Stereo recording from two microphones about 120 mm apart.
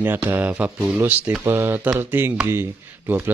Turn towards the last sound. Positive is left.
turn(degrees=-15)  # may be behind; listen again after turning